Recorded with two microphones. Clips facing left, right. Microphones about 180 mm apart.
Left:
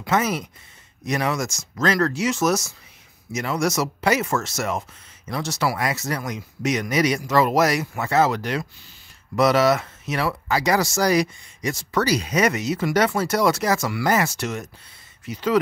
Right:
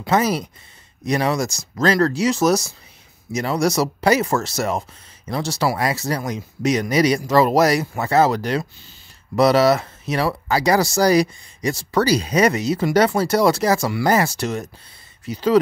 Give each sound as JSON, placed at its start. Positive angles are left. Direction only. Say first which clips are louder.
{"t": 0.0, "sound": "speech", "louder": "right 3 dB", "side_deg": -35}